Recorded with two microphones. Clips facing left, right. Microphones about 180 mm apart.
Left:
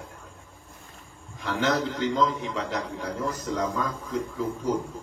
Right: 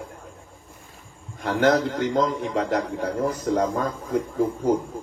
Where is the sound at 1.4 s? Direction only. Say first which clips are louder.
Right 6 dB; 50° right (ahead or behind).